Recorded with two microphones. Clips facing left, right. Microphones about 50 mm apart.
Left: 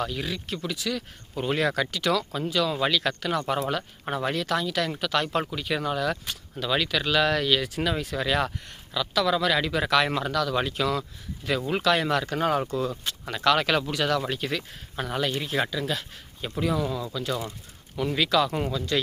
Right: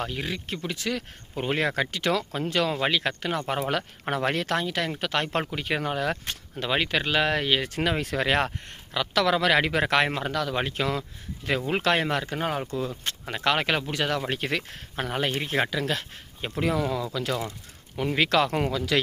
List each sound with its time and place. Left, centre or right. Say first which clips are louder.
0.0 s speech: left 1 dB; right
0.8 s speech: right 2 dB; right
1.4 s speech: left 1 dB; right
2.5 s speech: even; right
2.7 s speech: left 1 dB; right
3.7 s speech: right 1 dB; right
7.6 s speech: right 1 dB; right
12.0 s speech: left 3 dB; right
13.2 s speech: left 2 dB; right
14.3 s speech: right 1 dB; right
15.7 s speech: right 1 dB; right
17.9 s speech: right 1 dB; right
18.3 s speech: right 1 dB; right